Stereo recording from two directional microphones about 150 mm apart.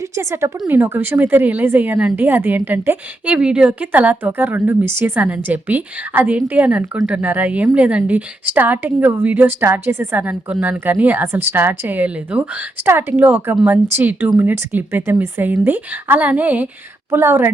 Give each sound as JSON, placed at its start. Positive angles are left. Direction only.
{"t": 0.2, "sound": "speech", "side_deg": -20}